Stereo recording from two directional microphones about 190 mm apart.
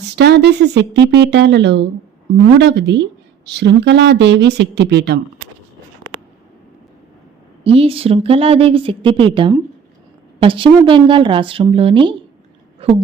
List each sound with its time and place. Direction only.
0.2 s speech: 60° right (ahead or behind)
7.6 s a woman's voice: 30° right (ahead or behind)